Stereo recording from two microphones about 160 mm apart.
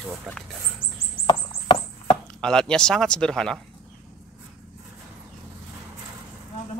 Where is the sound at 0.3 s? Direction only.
Centre (ahead or behind).